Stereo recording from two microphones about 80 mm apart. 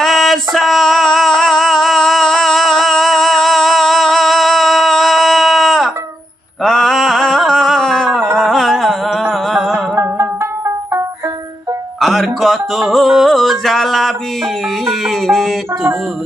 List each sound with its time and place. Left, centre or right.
0.0 s singing: centre
6.6 s a sound: centre
8.4 s music: centre
9.7 s music: right
11.9 s music: centre